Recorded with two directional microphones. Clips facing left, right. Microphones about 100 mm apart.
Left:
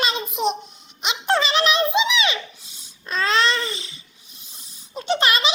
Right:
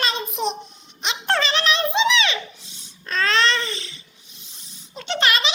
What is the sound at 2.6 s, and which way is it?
Babbling, 30° right (ahead or behind).